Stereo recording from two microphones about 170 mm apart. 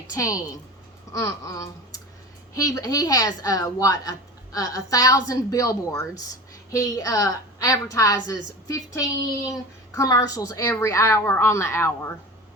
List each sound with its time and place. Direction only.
0.1 s a woman's voice: 20° left (ahead or behind)